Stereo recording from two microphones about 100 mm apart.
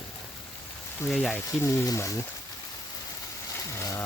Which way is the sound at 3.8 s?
30° left (ahead or behind).